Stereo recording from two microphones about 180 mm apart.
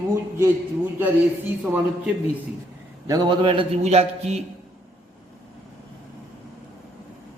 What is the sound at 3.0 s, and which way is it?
A man's voice, 20° right (ahead or behind).